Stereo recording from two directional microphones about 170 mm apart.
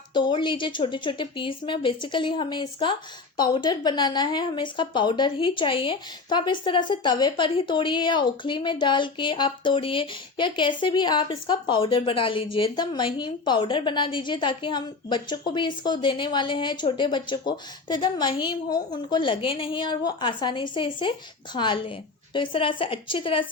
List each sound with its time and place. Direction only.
0.1 s a woman's voice: 25° left (ahead or behind)